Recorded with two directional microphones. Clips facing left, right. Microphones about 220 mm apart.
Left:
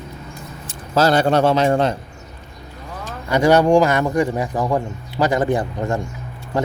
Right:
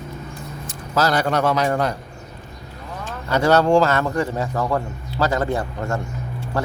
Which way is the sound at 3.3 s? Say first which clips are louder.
Left 2 dB; 15° left (ahead or behind).